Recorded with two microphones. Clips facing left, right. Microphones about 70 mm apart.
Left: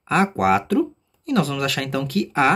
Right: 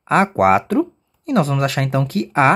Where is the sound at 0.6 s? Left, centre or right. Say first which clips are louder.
Right 2 dB; right.